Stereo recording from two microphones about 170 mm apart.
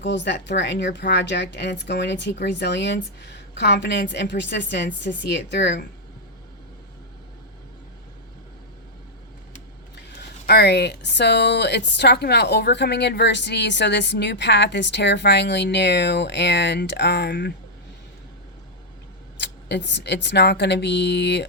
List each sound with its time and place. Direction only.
0.0 s speech: 90° left
9.9 s speech: 75° left (ahead or behind)
19.4 s speech: 90° left